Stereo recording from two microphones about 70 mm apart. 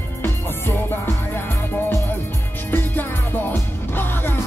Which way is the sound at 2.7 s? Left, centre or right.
Left.